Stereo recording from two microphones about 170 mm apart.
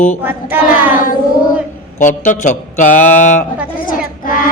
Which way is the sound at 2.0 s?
50° left (ahead or behind).